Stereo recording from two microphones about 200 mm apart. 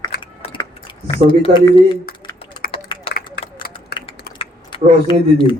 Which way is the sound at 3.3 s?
45° left (ahead or behind).